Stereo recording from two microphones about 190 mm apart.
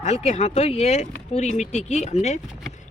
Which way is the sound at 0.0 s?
35° left (ahead or behind).